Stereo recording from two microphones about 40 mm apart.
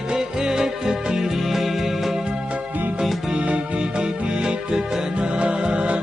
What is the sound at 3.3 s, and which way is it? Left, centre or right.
Music, right.